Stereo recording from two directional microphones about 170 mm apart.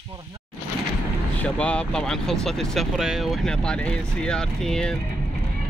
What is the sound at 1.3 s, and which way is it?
Speech, 5° left (ahead or behind).